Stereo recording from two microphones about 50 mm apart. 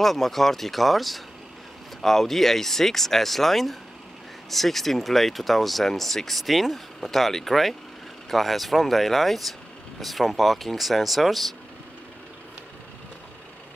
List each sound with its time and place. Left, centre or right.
0.0 s speech: centre